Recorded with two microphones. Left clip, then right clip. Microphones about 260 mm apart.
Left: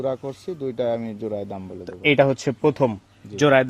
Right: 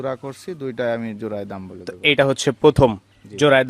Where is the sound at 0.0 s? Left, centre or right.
Right.